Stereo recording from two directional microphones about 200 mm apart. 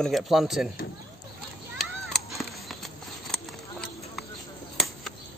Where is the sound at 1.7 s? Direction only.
Centre (ahead or behind).